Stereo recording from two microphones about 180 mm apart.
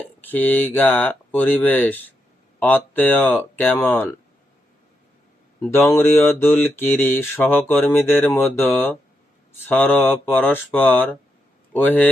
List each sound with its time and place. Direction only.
0.2 s mantra: 10° left (ahead or behind)
5.6 s mantra: 10° left (ahead or behind)